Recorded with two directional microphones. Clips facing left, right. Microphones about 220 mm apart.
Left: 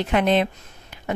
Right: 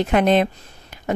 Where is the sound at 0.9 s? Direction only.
40° right (ahead or behind).